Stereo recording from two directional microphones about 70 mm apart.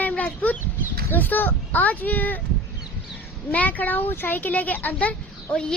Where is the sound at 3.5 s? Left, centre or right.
Left.